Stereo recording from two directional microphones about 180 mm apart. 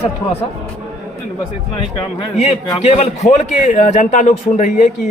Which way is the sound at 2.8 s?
40° left (ahead or behind).